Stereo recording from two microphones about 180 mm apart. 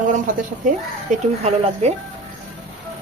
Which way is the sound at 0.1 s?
45° right (ahead or behind).